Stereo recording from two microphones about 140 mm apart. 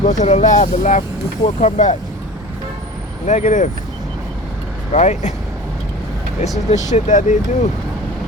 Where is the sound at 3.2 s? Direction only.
60° left (ahead or behind).